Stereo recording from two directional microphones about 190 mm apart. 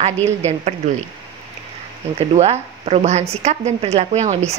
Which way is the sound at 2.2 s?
35° right (ahead or behind).